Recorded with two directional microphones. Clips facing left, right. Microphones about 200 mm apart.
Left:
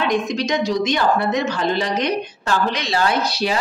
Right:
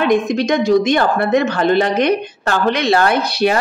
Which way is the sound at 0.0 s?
55° right (ahead or behind).